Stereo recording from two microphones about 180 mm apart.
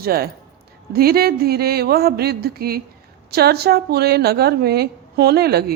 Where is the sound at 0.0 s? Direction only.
60° right (ahead or behind).